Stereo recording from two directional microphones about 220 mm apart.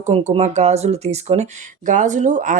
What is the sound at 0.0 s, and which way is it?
Speech, 30° right (ahead or behind).